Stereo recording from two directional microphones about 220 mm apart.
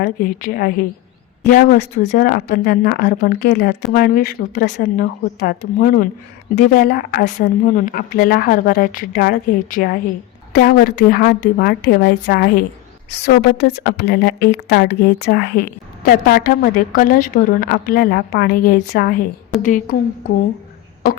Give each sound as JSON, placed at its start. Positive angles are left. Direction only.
{"t": 0.0, "sound": "a woman's voice", "side_deg": 40}